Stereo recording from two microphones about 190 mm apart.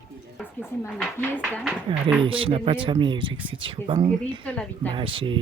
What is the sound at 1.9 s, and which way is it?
Speech, 25° right (ahead or behind).